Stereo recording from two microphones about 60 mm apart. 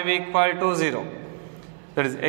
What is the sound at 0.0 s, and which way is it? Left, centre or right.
A man's voice, centre.